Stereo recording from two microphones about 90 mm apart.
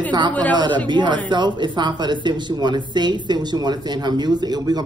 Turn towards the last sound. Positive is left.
turn(degrees=-50)  # may be behind; listen again after turning